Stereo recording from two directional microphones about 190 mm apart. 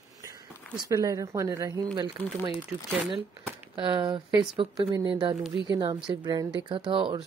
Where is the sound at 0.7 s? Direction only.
20° right (ahead or behind).